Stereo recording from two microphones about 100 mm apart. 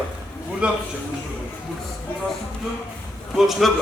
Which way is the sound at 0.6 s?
10° right (ahead or behind).